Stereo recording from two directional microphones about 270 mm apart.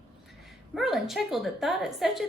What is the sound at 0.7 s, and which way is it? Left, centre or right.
A woman's voice, centre.